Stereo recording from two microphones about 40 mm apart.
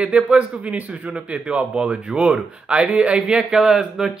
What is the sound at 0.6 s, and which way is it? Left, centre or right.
Speech, right.